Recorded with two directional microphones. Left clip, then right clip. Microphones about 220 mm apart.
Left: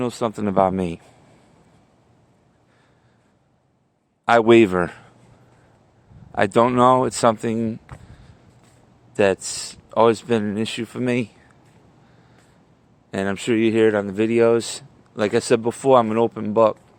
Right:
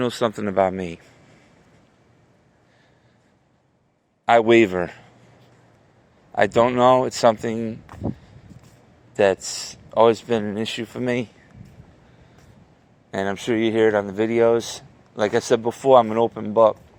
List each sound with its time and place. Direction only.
0.0 s speech: 15° left (ahead or behind)
0.4 s speech: 35° left (ahead or behind)
4.3 s speech: 40° left (ahead or behind)
6.3 s speech: 35° left (ahead or behind)
9.1 s speech: 35° left (ahead or behind)
13.1 s speech: 40° left (ahead or behind)